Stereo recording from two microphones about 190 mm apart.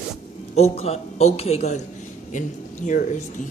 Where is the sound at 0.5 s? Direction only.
35° left (ahead or behind).